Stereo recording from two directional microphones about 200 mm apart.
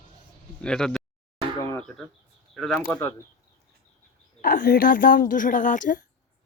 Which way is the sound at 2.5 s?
Centre (ahead or behind).